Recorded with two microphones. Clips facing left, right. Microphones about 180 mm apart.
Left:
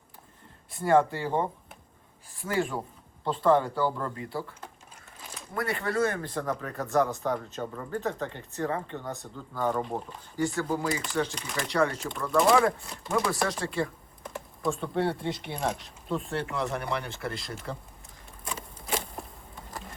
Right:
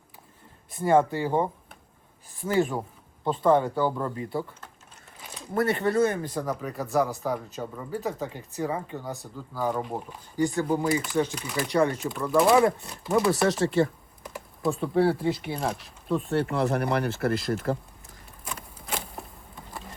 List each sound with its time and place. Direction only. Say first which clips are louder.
0.7 s speech: right 1 dB; 20° right (ahead or behind)
5.5 s speech: right 5 dB; 25° right (ahead or behind); by 10.2 s 5° right (ahead or behind)
10.3 s speech: right 4 dB; 20° right (ahead or behind)
11.3 s speech: right 3 dB; 5° right (ahead or behind)
11.7 s speech: right 3 dB; 20° right (ahead or behind)
11.9 s speech: right 3 dB; centre (ahead or behind)
13.1 s speech: right 5 dB; 30° right (ahead or behind)
14.3 s speech: right 2 dB; 5° right (ahead or behind)
16.6 s speech: right 5 dB; 40° right (ahead or behind)
17.5 s speech: right 10 dB; 55° right (ahead or behind)
18.4 s a sound: left 1 dB; centre (ahead or behind)